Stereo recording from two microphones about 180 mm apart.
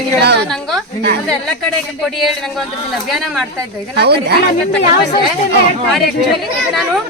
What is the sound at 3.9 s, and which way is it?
Speech, 65° right (ahead or behind).